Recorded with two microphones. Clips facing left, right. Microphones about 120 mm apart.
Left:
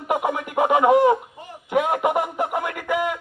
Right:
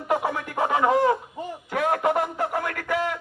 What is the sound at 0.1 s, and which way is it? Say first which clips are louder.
Music: left 2 dB; 15° left (ahead or behind).